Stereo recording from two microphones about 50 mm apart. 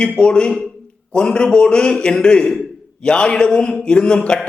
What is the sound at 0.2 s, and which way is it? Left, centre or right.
A man's voice, centre.